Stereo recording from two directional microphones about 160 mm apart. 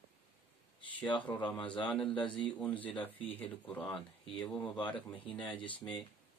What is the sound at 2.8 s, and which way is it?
Speech, 30° left (ahead or behind).